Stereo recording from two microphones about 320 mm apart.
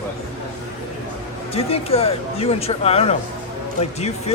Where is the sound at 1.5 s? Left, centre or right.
Centre.